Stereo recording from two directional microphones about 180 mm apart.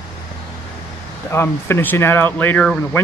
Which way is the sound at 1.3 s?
15° left (ahead or behind).